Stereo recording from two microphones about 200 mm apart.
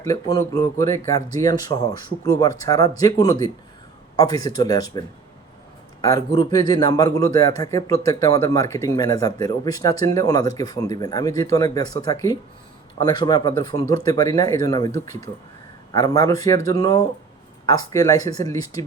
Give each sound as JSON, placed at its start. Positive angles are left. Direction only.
{"t": 0.0, "sound": "speech", "side_deg": 15}